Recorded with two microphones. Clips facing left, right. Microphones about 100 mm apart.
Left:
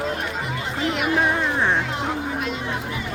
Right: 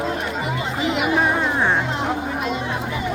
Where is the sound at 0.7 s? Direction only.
15° right (ahead or behind).